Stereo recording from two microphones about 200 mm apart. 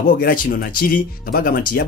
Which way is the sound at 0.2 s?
45° left (ahead or behind).